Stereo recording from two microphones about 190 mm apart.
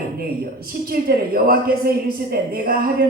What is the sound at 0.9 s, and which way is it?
A woman's voice, 50° right (ahead or behind).